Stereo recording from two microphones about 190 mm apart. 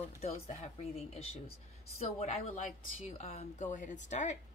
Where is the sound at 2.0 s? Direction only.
35° left (ahead or behind).